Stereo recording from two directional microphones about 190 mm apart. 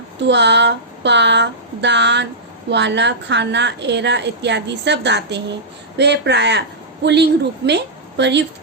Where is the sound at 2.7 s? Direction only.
65° right (ahead or behind).